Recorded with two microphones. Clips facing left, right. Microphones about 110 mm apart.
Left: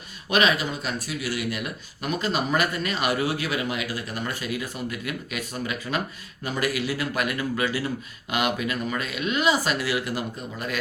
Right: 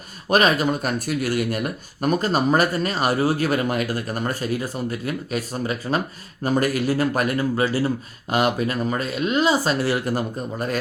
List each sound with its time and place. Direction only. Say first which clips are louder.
0.3 s speech: right 4 dB; 45° right (ahead or behind)